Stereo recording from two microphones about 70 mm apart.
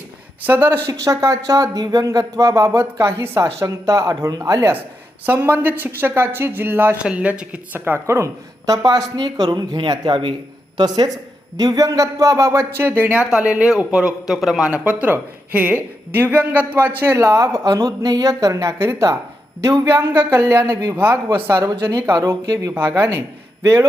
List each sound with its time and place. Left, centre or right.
0.4 s speech: right
0.9 s speech: right
5.2 s speech: right
7.0 s a man's voice: centre
7.9 s speech: right
8.6 s a woman's voice: right
9.1 s speech: right
13.1 s a man's voice: centre
14.7 s a man's voice: centre
17.2 s speech: right
20.9 s speech: right
21.8 s speech: right
22.4 s a woman's voice: right